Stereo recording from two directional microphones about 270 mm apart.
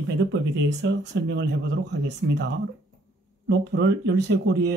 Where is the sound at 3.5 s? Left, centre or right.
Right.